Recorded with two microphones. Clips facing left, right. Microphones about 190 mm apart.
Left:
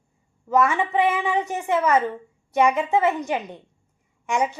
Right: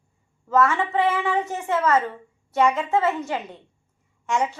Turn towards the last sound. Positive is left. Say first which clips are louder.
# even
turn(degrees=15)  # may be behind; listen again after turning